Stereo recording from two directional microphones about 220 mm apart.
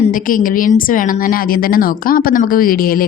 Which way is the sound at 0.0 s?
40° left (ahead or behind).